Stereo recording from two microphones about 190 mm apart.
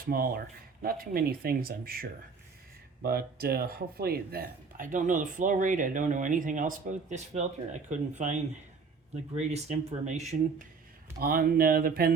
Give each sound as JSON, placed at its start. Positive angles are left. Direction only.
{"t": 0.1, "sound": "speech", "side_deg": -50}
{"t": 11.2, "sound": "speech", "side_deg": -50}